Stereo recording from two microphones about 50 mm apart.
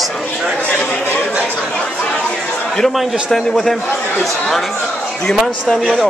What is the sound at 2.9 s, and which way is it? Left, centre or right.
A man's voice, centre.